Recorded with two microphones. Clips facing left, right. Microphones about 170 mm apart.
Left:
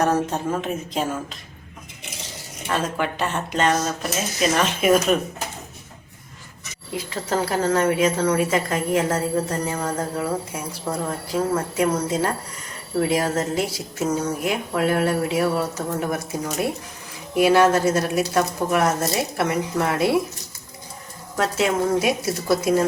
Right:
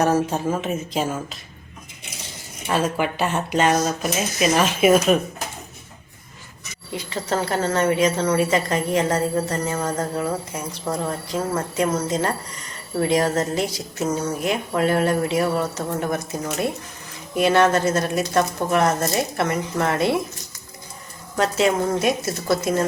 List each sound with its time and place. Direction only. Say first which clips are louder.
0.0 s speech: right 1 dB; 5° right (ahead or behind)
2.6 s speech: right 2 dB; 10° right (ahead or behind)
6.9 s speech: even; centre (ahead or behind)
21.3 s speech: right 2 dB; centre (ahead or behind)